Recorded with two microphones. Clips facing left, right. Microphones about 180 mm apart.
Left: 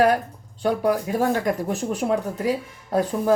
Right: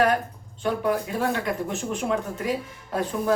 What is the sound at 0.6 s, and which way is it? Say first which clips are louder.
Speech: left 3 dB; 40° left (ahead or behind).